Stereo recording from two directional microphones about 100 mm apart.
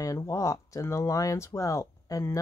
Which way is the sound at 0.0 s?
30° left (ahead or behind).